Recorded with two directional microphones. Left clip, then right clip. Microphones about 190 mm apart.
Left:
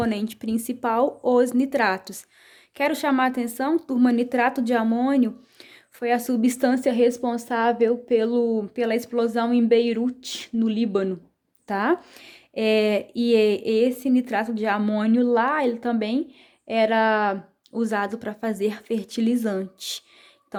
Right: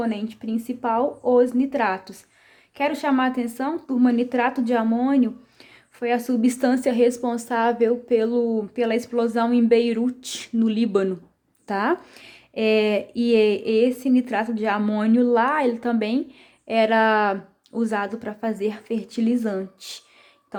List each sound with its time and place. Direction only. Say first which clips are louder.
0.0 s a woman's voice: left 1 dB; 35° left (ahead or behind)